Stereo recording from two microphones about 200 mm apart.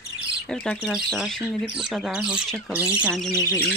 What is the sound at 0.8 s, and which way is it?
Speech, centre (ahead or behind).